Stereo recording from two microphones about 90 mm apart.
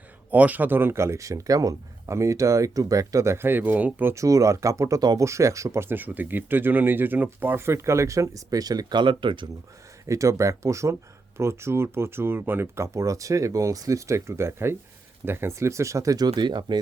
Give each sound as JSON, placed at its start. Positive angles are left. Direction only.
{"t": 0.3, "sound": "speech", "side_deg": -15}
{"t": 4.1, "sound": "speech", "side_deg": -35}
{"t": 10.1, "sound": "speech", "side_deg": -35}